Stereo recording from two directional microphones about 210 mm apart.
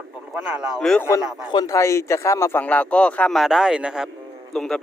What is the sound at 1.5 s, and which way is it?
Speech, 20° left (ahead or behind).